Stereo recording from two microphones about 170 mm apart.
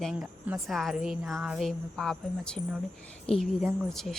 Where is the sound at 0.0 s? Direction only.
Centre (ahead or behind).